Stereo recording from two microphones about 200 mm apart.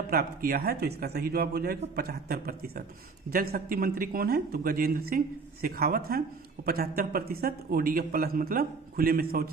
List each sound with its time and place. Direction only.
0.1 s speech: 50° right (ahead or behind)